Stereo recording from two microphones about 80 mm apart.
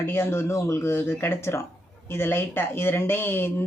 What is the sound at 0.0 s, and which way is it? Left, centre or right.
A woman's voice, left.